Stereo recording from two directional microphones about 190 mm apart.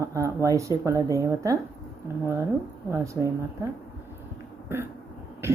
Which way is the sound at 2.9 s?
15° right (ahead or behind).